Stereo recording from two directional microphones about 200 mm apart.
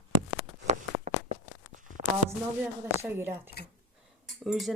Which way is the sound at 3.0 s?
10° right (ahead or behind).